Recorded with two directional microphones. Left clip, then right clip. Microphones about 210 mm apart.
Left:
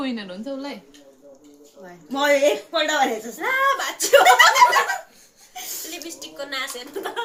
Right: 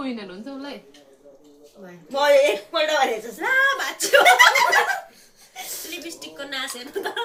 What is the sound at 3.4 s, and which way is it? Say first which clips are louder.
Speech: right 1 dB; centre (ahead or behind).